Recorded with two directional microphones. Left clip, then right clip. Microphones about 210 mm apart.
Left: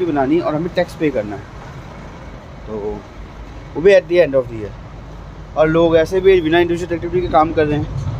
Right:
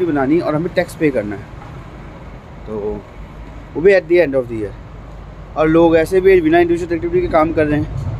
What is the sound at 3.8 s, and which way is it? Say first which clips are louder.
Speech: even; 10° right (ahead or behind).